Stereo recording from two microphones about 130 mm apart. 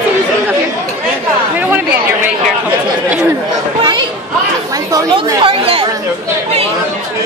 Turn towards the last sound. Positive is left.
turn(degrees=-45)  # may be behind; listen again after turning